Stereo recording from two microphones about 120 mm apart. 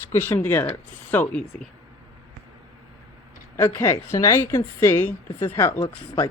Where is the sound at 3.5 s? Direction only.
20° left (ahead or behind).